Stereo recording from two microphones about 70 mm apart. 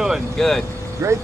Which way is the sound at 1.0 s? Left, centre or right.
Right.